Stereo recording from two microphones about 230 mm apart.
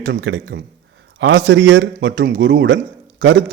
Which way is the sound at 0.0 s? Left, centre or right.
Right.